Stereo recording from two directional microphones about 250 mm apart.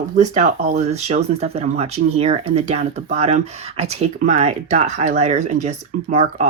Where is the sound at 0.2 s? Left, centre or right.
Right.